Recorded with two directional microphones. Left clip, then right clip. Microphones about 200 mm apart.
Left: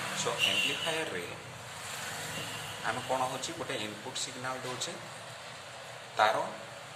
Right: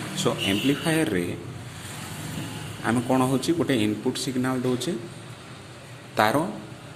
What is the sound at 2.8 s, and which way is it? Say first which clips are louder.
Speech: right 8 dB; 40° right (ahead or behind).